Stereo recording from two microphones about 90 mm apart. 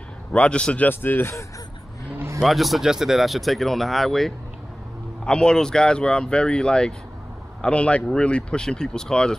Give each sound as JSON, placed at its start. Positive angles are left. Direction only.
{"t": 0.3, "sound": "speech", "side_deg": 10}
{"t": 0.8, "sound": "speech", "side_deg": 25}
{"t": 2.1, "sound": "vehicle", "side_deg": -30}
{"t": 2.4, "sound": "speech", "side_deg": 0}